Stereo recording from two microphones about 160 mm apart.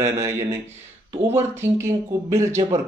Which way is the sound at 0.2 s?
15° right (ahead or behind).